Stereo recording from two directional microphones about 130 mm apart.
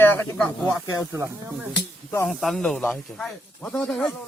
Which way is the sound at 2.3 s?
5° left (ahead or behind).